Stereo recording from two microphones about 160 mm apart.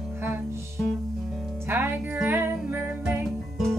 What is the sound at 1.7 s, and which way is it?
Music, 10° right (ahead or behind).